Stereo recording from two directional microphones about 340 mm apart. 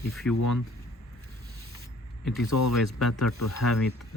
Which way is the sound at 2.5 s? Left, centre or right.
Left.